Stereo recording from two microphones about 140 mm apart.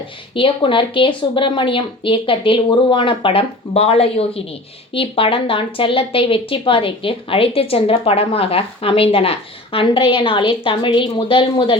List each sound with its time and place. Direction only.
0.3 s speech: 40° left (ahead or behind)